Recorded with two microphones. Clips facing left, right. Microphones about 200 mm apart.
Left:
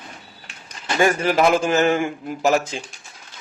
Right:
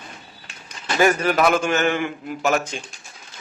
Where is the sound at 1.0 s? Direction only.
25° left (ahead or behind).